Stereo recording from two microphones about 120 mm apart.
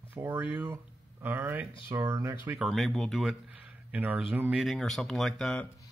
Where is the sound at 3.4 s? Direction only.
10° right (ahead or behind).